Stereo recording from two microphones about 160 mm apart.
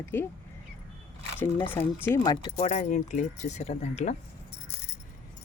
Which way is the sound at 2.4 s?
40° left (ahead or behind).